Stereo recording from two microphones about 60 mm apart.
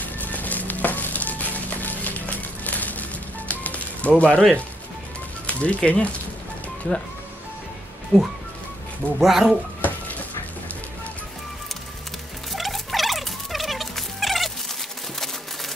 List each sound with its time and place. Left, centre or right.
0.0 s music: left
4.2 s speech: centre
5.5 s a sound: left
5.8 s speech: centre
8.1 s speech: left
9.2 s speech: centre
9.8 s a sound: left
12.5 s rodents: centre